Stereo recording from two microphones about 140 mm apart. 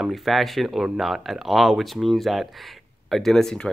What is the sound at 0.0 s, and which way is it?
Speech, centre (ahead or behind).